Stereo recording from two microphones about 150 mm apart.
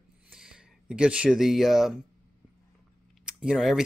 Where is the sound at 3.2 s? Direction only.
5° right (ahead or behind).